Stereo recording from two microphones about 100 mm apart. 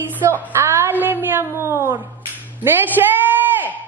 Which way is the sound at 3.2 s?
20° right (ahead or behind).